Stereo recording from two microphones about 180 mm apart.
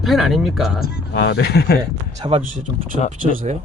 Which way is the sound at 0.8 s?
70° left (ahead or behind).